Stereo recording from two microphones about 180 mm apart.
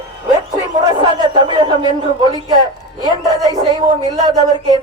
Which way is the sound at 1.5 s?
25° right (ahead or behind).